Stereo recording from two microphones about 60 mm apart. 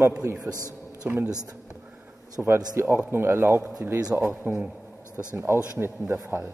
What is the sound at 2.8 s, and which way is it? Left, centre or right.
A man's voice, right.